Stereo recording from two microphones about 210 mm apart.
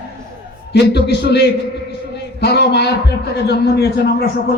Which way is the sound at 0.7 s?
50° left (ahead or behind).